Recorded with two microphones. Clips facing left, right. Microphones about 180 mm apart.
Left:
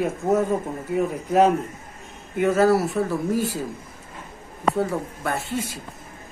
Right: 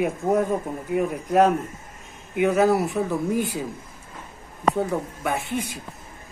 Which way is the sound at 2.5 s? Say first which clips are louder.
Left 2 dB; 20° right (ahead or behind).